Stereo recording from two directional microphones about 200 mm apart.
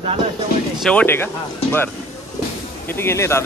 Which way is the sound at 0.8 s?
5° left (ahead or behind).